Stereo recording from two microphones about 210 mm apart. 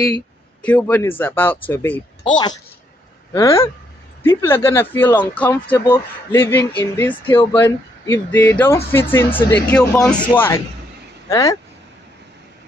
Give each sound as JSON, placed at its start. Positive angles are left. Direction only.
{"t": 0.6, "sound": "speech", "side_deg": 5}
{"t": 3.3, "sound": "speech", "side_deg": 15}